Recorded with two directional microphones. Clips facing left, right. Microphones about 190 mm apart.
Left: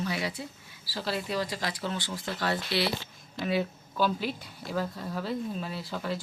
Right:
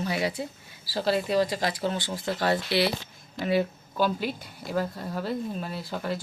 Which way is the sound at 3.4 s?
Centre (ahead or behind).